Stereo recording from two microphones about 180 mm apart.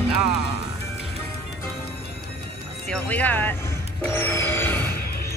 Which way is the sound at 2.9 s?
10° left (ahead or behind).